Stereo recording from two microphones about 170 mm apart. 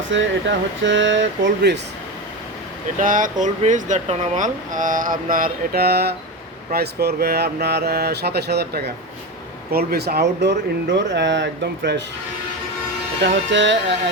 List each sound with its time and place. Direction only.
0.1 s speech: 90° right
3.0 s speech: 50° right (ahead or behind); by 12.0 s 90° right
13.2 s speech: 90° right